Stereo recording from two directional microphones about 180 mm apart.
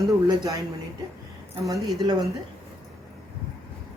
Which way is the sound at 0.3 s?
20° right (ahead or behind).